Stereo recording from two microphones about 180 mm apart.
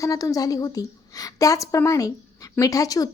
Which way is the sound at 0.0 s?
20° left (ahead or behind).